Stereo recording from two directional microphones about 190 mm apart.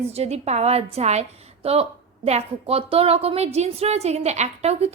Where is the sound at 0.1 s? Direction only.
35° right (ahead or behind).